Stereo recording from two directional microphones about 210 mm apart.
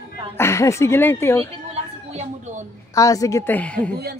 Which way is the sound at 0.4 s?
15° left (ahead or behind).